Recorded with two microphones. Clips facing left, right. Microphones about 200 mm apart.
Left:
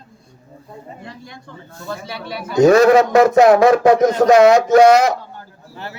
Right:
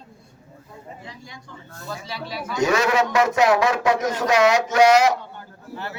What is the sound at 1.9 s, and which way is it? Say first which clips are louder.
A man's voice: left 4 dB; 60° left (ahead or behind).